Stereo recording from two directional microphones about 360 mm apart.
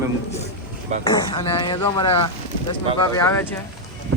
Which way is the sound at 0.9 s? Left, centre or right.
Centre.